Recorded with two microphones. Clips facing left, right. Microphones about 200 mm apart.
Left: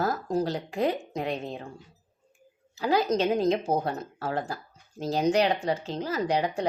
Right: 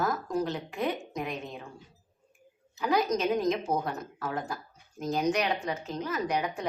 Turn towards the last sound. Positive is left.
turn(degrees=30)  # may be behind; listen again after turning